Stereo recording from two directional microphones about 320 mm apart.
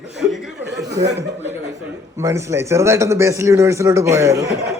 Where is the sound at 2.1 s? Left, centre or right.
Centre.